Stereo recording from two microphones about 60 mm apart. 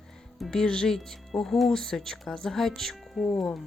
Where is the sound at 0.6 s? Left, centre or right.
Centre.